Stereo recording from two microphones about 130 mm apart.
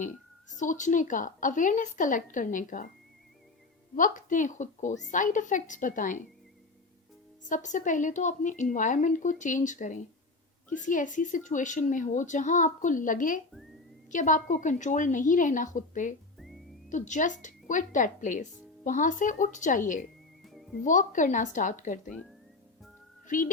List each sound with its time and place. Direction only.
0.5 s a woman's voice: 75° left (ahead or behind)
3.9 s a woman's voice: 85° left
7.4 s speech: 70° left (ahead or behind); by 13.4 s 90° left
14.1 s a woman's voice: 80° left
20.4 s music: centre (ahead or behind)
20.8 s speech: 80° left
23.2 s speech: 90° left